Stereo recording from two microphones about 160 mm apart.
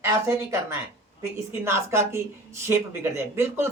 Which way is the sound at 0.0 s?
15° right (ahead or behind).